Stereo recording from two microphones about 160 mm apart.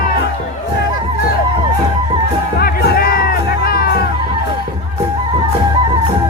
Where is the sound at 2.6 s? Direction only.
70° left (ahead or behind).